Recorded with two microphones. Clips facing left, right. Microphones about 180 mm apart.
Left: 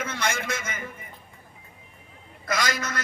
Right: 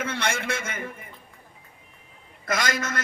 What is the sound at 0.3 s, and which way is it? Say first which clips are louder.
Speech: left 1 dB; 30° right (ahead or behind).